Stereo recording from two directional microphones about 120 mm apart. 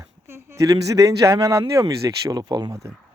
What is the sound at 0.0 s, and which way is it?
Speech, 20° right (ahead or behind).